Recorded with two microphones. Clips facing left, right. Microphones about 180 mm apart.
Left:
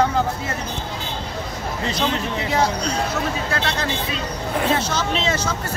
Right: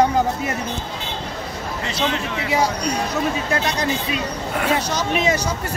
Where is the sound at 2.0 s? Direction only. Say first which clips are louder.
Right 1 dB; 10° right (ahead or behind).